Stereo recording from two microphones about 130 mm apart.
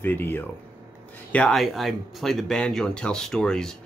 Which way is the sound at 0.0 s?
15° left (ahead or behind).